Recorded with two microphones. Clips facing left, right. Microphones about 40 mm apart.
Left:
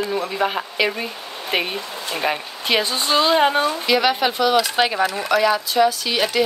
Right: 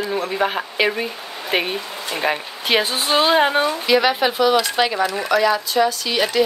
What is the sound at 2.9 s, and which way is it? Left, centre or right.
Speech, right.